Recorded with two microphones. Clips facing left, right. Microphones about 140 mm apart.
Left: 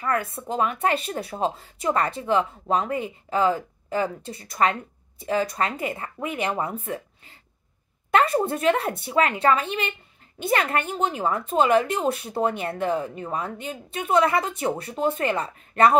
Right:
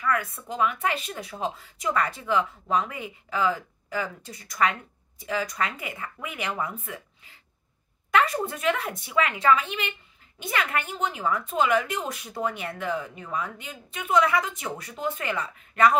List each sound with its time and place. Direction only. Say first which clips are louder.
0.0 s a woman's voice: left 1 dB; 30° left (ahead or behind)